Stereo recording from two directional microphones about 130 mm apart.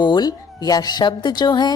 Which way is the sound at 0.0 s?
35° left (ahead or behind).